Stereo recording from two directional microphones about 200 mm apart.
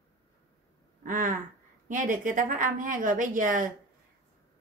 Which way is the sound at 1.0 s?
40° right (ahead or behind).